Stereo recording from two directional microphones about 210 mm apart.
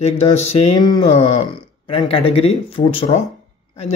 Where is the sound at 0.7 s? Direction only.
20° left (ahead or behind).